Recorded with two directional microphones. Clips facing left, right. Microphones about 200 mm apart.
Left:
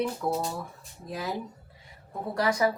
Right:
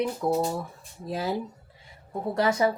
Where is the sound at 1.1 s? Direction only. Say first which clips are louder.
Right 4 dB; 30° right (ahead or behind).